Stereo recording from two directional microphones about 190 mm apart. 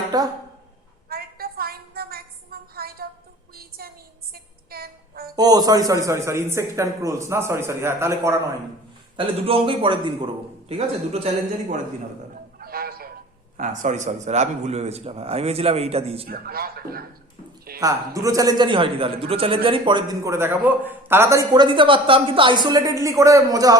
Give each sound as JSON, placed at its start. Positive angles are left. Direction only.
{"t": 0.1, "sound": "a man's voice", "side_deg": -20}
{"t": 1.1, "sound": "a sound", "side_deg": -50}
{"t": 4.7, "sound": "child singing", "side_deg": -55}
{"t": 5.4, "sound": "a man's voice", "side_deg": -20}
{"t": 9.1, "sound": "a man's voice", "side_deg": -30}
{"t": 12.5, "sound": "a sound", "side_deg": -50}
{"t": 13.6, "sound": "a man's voice", "side_deg": -40}
{"t": 16.2, "sound": "a man's voice", "side_deg": -55}
{"t": 17.7, "sound": "a man's voice", "side_deg": -20}